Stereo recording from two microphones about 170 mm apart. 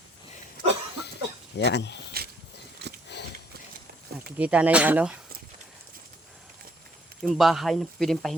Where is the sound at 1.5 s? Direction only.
85° left.